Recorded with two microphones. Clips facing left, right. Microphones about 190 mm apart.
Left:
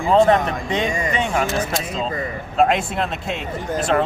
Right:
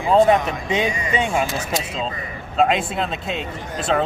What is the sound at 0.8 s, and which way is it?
Speech, 45° left (ahead or behind).